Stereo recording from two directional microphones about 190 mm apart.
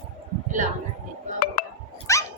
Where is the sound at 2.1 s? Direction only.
15° left (ahead or behind).